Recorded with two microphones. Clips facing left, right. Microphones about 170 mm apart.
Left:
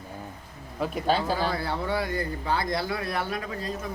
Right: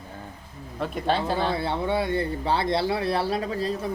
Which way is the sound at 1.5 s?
25° right (ahead or behind).